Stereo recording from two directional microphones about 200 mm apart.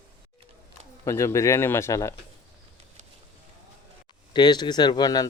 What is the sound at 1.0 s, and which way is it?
Speech, 15° left (ahead or behind).